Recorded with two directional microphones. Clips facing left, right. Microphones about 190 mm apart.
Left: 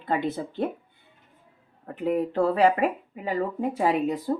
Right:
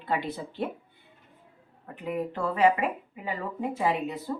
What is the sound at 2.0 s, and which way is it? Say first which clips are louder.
Speech: left 7 dB; 40° left (ahead or behind).